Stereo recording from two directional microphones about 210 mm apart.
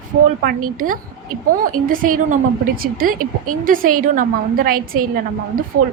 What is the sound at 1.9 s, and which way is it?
A woman's voice, 40° right (ahead or behind).